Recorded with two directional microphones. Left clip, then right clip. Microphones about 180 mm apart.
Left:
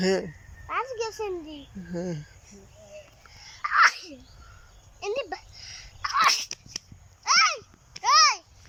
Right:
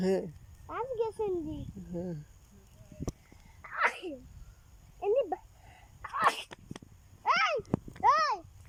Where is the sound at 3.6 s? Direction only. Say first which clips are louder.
Left 11 dB; 20° right (ahead or behind).